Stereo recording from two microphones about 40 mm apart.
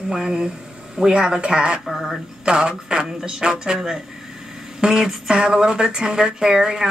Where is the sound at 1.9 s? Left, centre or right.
Centre.